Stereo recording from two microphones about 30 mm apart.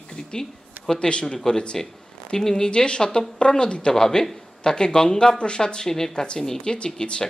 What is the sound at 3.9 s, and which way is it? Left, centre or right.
A man's voice, centre.